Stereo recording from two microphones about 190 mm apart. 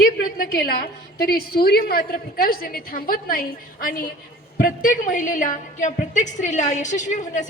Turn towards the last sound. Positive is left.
turn(degrees=40)  # may be behind; listen again after turning